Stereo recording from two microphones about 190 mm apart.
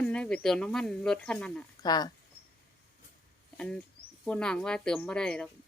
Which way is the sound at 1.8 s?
20° left (ahead or behind).